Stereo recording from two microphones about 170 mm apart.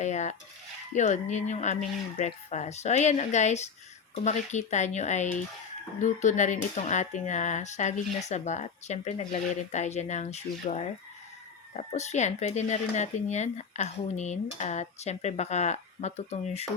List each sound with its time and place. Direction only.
0.0 s cutlery: 45° left (ahead or behind)
0.9 s speech: 45° left (ahead or behind)